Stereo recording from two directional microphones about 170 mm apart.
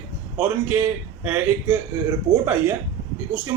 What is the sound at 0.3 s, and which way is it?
Speech, 10° right (ahead or behind).